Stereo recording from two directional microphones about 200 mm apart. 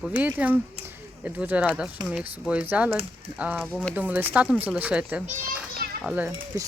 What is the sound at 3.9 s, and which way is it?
Speech, 10° right (ahead or behind).